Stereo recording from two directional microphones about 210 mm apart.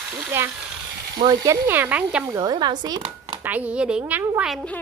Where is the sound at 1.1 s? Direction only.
20° right (ahead or behind).